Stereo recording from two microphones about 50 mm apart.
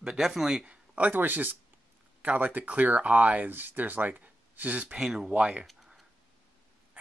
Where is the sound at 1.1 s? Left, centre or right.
Right.